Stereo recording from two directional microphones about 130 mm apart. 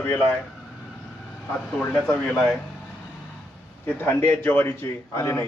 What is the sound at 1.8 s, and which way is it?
Speech, 10° left (ahead or behind).